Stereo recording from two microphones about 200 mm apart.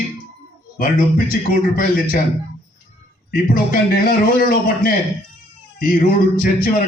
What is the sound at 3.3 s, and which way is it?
Speech, 45° left (ahead or behind).